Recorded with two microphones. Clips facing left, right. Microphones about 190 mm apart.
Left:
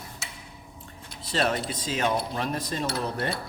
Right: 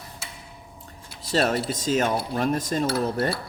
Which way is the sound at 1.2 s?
40° right (ahead or behind).